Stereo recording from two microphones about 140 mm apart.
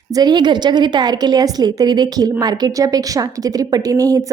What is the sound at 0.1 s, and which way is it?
A woman's voice, 30° right (ahead or behind).